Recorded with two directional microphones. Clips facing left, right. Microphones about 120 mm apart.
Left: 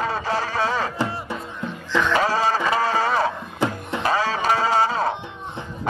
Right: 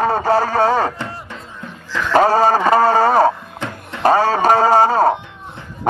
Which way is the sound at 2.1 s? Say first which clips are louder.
Right 11 dB; 45° right (ahead or behind).